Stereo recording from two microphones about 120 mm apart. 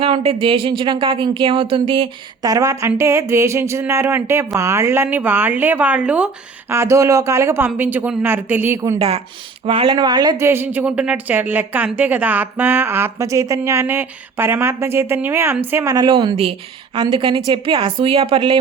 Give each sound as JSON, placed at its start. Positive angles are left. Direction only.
{"t": 0.0, "sound": "a woman's voice", "side_deg": -50}
{"t": 2.4, "sound": "speech", "side_deg": -30}
{"t": 6.7, "sound": "speech", "side_deg": -25}
{"t": 9.6, "sound": "speech", "side_deg": -45}
{"t": 10.3, "sound": "a woman's voice", "side_deg": -20}
{"t": 16.0, "sound": "a woman's voice", "side_deg": -40}